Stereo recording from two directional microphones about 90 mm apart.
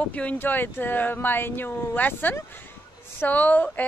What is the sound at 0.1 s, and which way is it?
Speech, 15° left (ahead or behind).